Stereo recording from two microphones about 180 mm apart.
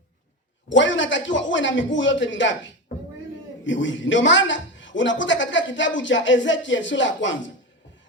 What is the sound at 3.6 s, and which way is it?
A woman's voice, 90° left.